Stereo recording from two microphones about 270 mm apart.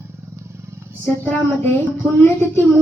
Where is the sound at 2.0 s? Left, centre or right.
Centre.